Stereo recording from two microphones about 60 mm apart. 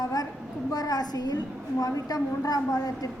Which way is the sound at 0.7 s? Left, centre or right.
Left.